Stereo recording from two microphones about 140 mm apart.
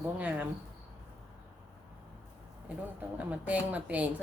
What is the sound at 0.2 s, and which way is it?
Speech, 10° right (ahead or behind).